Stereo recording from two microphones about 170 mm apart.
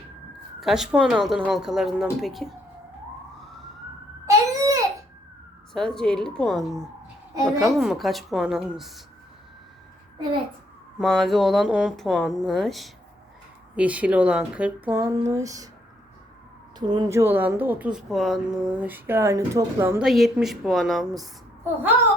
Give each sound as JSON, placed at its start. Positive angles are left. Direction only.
{"t": 0.6, "sound": "speech", "side_deg": -5}
{"t": 4.3, "sound": "babbling", "side_deg": -20}
{"t": 5.7, "sound": "speech", "side_deg": 5}
{"t": 7.3, "sound": "a woman's voice", "side_deg": -20}
{"t": 7.7, "sound": "speech", "side_deg": 0}
{"t": 10.9, "sound": "speech", "side_deg": 0}
{"t": 16.7, "sound": "speech", "side_deg": -25}
{"t": 20.0, "sound": "speech", "side_deg": 0}